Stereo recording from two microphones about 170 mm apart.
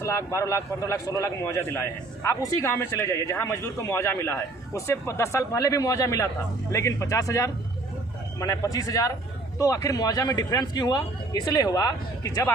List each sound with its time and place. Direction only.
0.0 s a man's voice: 15° left (ahead or behind)